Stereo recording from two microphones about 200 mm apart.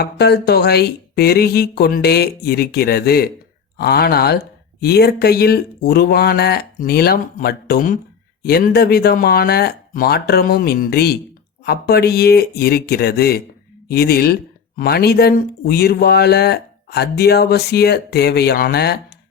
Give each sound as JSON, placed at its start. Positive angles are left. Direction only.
{"t": 0.0, "sound": "speech", "side_deg": 55}